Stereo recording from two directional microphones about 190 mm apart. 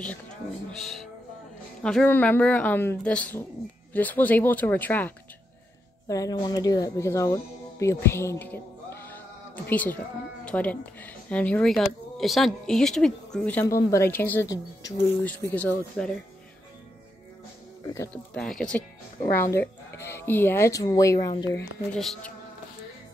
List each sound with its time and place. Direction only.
0.7 s music: centre (ahead or behind)
1.8 s speech: 5° left (ahead or behind)
9.7 s speech: 10° left (ahead or behind)
15.2 s speech: 5° left (ahead or behind)
17.8 s speech: 15° left (ahead or behind)
18.3 s speech: 5° left (ahead or behind)
21.9 s speech: centre (ahead or behind)